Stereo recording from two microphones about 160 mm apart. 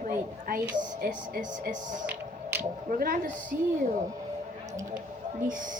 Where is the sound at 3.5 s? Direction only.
60° right (ahead or behind).